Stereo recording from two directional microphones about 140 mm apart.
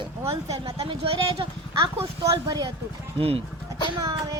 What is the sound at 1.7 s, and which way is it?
Speech, 25° right (ahead or behind).